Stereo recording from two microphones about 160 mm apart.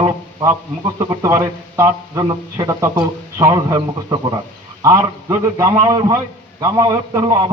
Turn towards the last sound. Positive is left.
turn(degrees=-20)  # may be behind; listen again after turning